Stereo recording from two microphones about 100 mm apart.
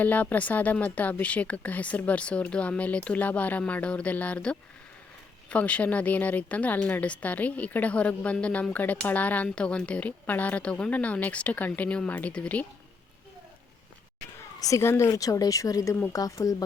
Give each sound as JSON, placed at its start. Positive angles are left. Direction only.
{"t": 0.0, "sound": "a woman's voice", "side_deg": 15}
{"t": 14.3, "sound": "a woman's voice", "side_deg": 30}